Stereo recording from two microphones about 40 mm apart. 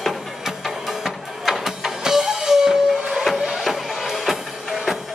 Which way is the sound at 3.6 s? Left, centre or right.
Centre.